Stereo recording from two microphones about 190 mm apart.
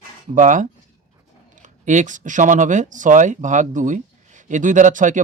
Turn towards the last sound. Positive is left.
turn(degrees=-40)  # may be behind; listen again after turning